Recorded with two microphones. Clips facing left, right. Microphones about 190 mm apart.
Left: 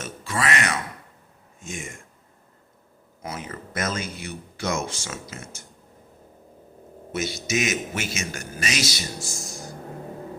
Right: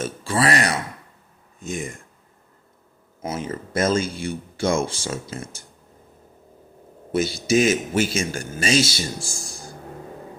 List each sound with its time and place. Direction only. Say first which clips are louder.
0.0 s a man's voice: right 6 dB; 30° right (ahead or behind)
3.2 s speech: right 6 dB; 25° right (ahead or behind)
7.1 s a man's voice: right 7 dB; 30° right (ahead or behind)